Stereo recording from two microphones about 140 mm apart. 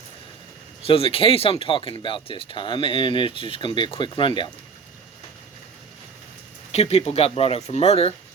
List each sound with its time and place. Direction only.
0.8 s speech: 40° left (ahead or behind)
6.7 s speech: 50° left (ahead or behind)